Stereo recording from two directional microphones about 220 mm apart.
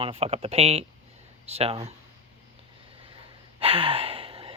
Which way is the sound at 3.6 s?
25° right (ahead or behind).